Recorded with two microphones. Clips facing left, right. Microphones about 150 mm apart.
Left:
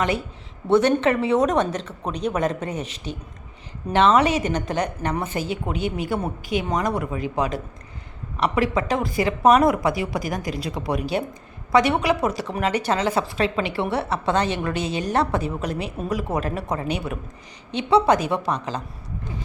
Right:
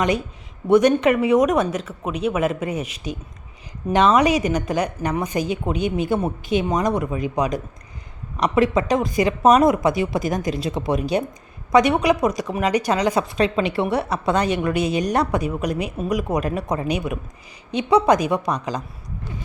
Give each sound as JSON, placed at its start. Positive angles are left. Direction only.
{"t": 0.7, "sound": "a woman's voice", "side_deg": -15}